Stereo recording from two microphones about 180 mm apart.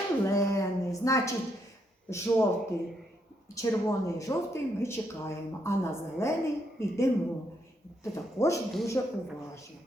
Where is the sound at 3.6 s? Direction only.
20° left (ahead or behind).